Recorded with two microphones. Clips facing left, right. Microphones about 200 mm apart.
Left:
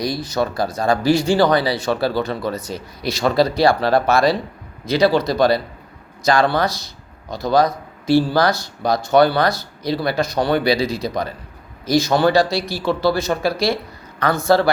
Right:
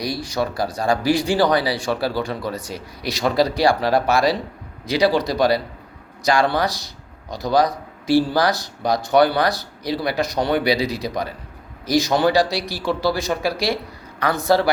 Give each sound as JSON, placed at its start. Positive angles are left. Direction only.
{"t": 0.0, "sound": "speech", "side_deg": -10}